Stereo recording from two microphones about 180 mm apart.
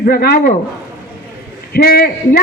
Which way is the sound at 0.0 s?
55° left (ahead or behind).